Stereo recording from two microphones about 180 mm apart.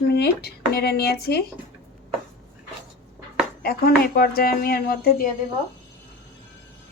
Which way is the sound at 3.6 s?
60° left (ahead or behind).